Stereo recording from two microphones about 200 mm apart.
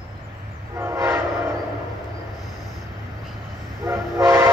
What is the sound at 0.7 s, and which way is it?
Train, 15° right (ahead or behind).